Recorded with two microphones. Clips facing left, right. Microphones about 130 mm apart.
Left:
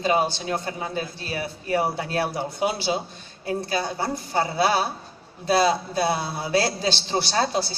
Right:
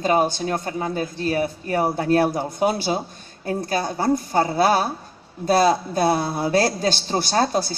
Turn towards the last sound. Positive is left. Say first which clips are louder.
# right 3 dB
turn(degrees=-45)  # may be behind; listen again after turning